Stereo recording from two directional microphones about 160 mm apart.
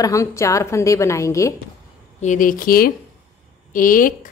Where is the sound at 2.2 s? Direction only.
55° left (ahead or behind).